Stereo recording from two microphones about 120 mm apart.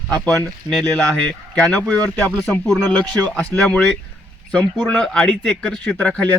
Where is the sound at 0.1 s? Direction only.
5° left (ahead or behind).